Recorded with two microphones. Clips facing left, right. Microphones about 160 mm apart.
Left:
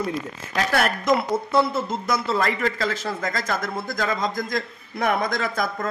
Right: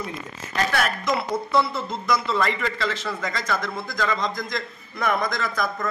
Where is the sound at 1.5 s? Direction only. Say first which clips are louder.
Left 2 dB; 45° left (ahead or behind).